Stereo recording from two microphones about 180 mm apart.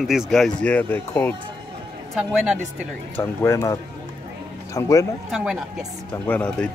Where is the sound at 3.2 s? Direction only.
15° left (ahead or behind).